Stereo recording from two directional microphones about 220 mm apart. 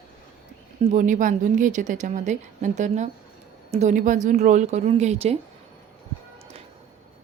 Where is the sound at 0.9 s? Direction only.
35° right (ahead or behind).